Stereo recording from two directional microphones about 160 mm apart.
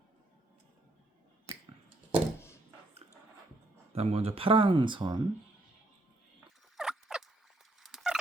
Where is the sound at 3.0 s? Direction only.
40° right (ahead or behind).